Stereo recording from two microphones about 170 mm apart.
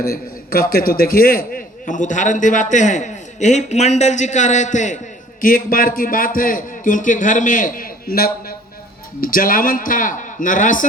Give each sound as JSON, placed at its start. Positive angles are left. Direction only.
{"t": 0.0, "sound": "a man's voice", "side_deg": 60}